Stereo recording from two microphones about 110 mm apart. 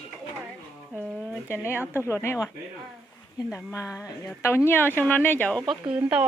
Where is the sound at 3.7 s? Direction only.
30° left (ahead or behind).